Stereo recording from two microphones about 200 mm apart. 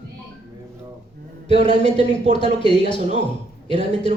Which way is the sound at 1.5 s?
35° right (ahead or behind).